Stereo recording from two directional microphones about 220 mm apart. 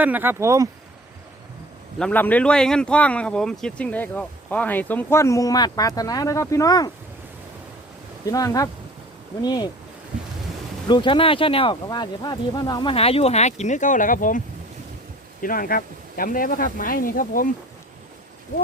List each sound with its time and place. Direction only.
0.0 s speech: 10° right (ahead or behind)
2.0 s speech: 5° left (ahead or behind)
8.3 s speech: 15° left (ahead or behind)
10.8 s speech: 20° left (ahead or behind); by 17.5 s 40° left (ahead or behind)